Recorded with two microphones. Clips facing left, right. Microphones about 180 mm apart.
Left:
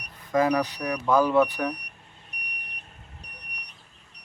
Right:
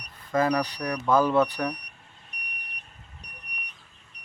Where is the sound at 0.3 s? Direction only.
15° left (ahead or behind).